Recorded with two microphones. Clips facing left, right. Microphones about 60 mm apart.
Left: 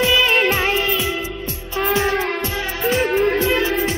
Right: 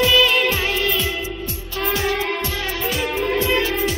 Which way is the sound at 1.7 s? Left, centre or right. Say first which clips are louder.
Left 3 dB; left.